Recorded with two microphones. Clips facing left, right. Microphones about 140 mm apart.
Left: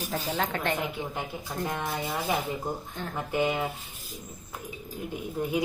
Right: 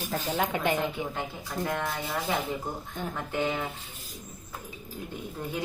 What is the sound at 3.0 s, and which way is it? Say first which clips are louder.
Speech: right 2 dB; 15° right (ahead or behind).